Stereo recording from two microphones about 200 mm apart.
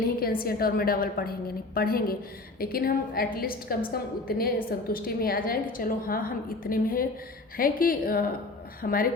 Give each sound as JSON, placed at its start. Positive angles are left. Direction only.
{"t": 0.4, "sound": "a woman's voice", "side_deg": 50}